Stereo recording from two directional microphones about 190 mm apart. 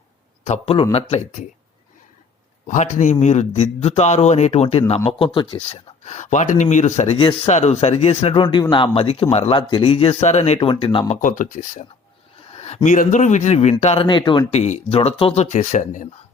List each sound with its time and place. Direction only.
0.4 s speech: 35° left (ahead or behind)
2.6 s speech: 40° left (ahead or behind)
11.2 s speech: 45° left (ahead or behind)